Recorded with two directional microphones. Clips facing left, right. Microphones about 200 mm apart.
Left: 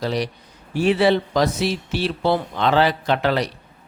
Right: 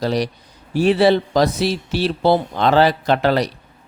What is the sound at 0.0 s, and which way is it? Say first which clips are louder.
Speech: right 3 dB; 40° right (ahead or behind).